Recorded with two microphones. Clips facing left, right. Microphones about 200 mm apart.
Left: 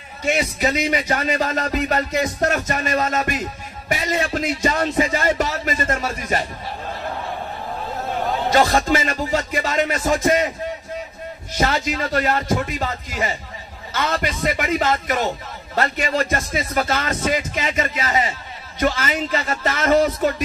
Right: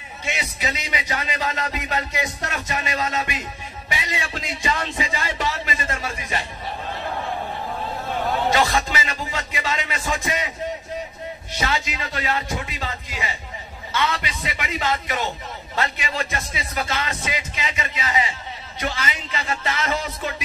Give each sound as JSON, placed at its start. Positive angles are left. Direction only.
{"t": 0.2, "sound": "a man's voice", "side_deg": 45}
{"t": 8.5, "sound": "a man's voice", "side_deg": 50}
{"t": 11.5, "sound": "a man's voice", "side_deg": 45}